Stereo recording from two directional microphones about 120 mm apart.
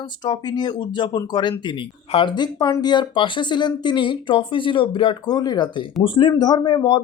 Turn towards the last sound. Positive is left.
turn(degrees=40)  # may be behind; listen again after turning